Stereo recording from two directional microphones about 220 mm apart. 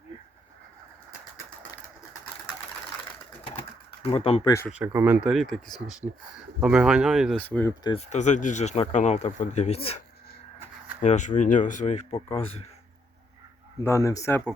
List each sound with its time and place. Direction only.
4.0 s speech: 25° left (ahead or behind)
4.8 s speech: 10° right (ahead or behind); by 7.7 s 10° left (ahead or behind)
7.9 s speech: 30° left (ahead or behind)
11.0 s speech: 35° left (ahead or behind)
13.8 s speech: 15° left (ahead or behind)